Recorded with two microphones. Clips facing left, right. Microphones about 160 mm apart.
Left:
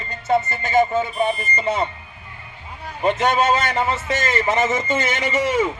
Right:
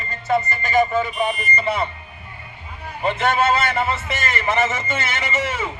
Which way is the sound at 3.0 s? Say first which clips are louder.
Left 1 dB; 15° left (ahead or behind).